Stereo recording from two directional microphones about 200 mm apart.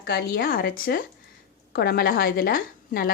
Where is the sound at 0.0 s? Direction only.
50° left (ahead or behind).